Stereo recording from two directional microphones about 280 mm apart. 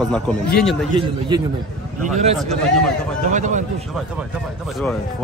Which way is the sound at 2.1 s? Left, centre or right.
Right.